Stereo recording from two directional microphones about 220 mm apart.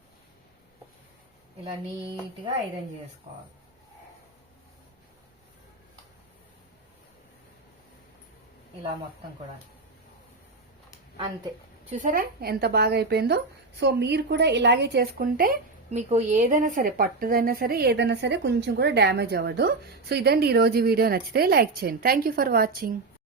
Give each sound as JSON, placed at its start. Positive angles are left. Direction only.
{"t": 11.9, "sound": "speech", "side_deg": -35}